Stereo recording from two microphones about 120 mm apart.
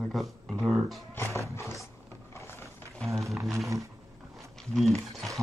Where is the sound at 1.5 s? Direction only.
25° left (ahead or behind).